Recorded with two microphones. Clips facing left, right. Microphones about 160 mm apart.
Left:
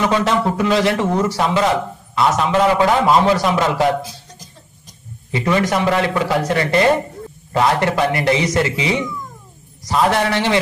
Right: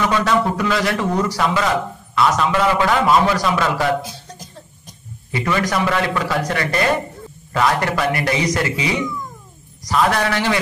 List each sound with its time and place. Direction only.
0.1 s a man's voice: 25° left (ahead or behind)
5.3 s a man's voice: 25° left (ahead or behind)